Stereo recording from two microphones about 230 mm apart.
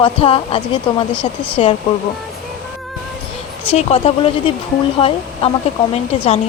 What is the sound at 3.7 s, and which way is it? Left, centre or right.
A woman's voice, left.